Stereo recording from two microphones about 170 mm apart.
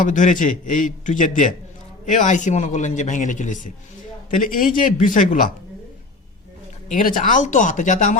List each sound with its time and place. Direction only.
0.0 s a man's voice: 50° left (ahead or behind)
6.8 s a man's voice: 50° left (ahead or behind)